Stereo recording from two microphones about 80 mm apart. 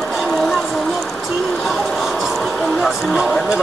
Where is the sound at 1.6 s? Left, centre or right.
Centre.